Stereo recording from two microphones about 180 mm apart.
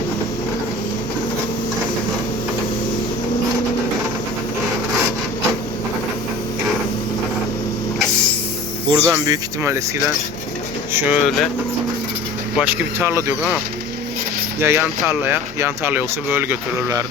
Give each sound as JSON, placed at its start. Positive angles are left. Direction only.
{"t": 8.9, "sound": "speech", "side_deg": -20}
{"t": 10.9, "sound": "speech", "side_deg": 0}
{"t": 12.5, "sound": "speech", "side_deg": -10}
{"t": 14.6, "sound": "speech", "side_deg": -15}